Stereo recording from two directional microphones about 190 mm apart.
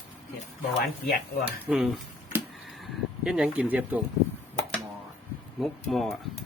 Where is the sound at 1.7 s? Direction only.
5° right (ahead or behind).